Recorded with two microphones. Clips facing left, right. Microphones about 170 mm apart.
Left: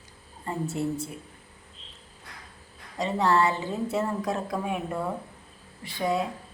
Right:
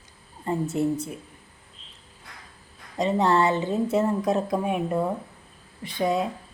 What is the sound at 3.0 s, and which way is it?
Speech, 20° right (ahead or behind).